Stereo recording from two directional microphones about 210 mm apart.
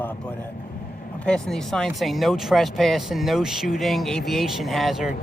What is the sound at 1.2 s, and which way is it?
Speech, 5° left (ahead or behind).